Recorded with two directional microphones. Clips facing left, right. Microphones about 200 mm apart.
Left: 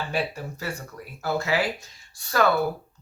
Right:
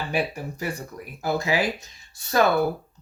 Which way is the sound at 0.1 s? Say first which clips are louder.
Right 2 dB; 15° right (ahead or behind).